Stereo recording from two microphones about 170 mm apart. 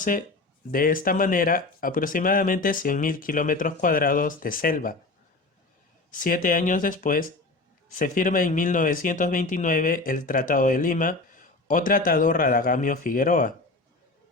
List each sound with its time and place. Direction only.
0.0 s speech: 50° left (ahead or behind)
6.1 s speech: 55° left (ahead or behind)